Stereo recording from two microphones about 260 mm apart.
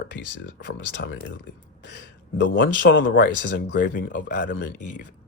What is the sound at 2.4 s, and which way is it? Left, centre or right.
Speech, left.